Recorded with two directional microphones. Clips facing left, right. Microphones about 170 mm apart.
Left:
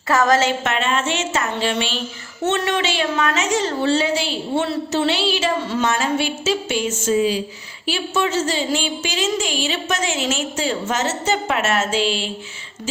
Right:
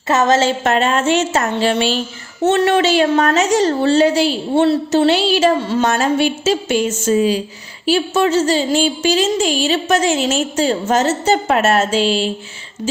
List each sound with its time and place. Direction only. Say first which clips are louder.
0.1 s a woman's voice: right 3 dB; 25° right (ahead or behind)